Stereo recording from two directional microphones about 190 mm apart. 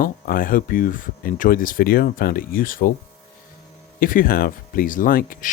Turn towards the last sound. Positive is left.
turn(degrees=50)  # may be behind; listen again after turning